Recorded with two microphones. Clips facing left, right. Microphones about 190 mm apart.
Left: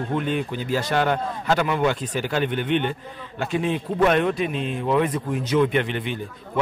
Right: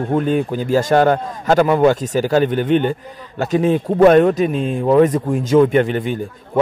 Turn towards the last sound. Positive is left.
turn(degrees=-45)  # may be behind; listen again after turning